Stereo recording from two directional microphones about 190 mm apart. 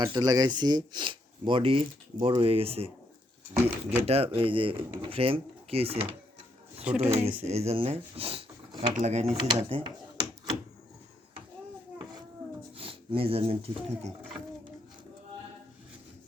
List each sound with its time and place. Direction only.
0.0 s speech: 20° right (ahead or behind)
9.3 s speech: 25° right (ahead or behind)
12.7 s speech: 30° right (ahead or behind)